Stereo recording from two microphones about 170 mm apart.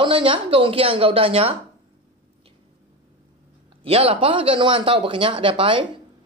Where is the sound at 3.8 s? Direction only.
35° right (ahead or behind).